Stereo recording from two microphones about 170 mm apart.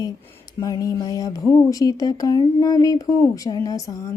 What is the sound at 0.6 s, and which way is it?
Speech, 20° left (ahead or behind).